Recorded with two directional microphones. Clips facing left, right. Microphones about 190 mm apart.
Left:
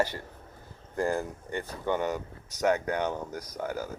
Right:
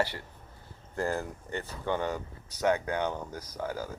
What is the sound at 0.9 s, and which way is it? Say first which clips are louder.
Speech: left 3 dB; 15° left (ahead or behind).